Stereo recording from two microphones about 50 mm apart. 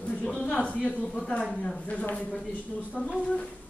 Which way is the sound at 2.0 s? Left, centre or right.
Left.